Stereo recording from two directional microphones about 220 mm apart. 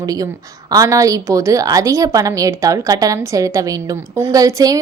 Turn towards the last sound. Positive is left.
turn(degrees=-15)  # may be behind; listen again after turning